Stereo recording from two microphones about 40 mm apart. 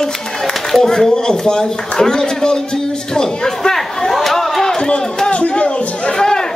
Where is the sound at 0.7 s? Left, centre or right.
Centre.